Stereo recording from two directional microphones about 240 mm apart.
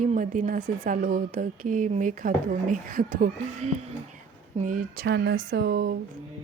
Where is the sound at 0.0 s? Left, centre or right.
Right.